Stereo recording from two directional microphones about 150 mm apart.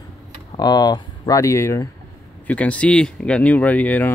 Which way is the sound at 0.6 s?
25° left (ahead or behind).